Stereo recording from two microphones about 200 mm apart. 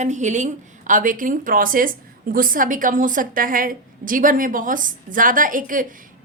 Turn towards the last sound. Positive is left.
turn(degrees=-40)  # may be behind; listen again after turning